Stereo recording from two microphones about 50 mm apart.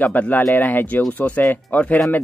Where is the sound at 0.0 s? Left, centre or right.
Left.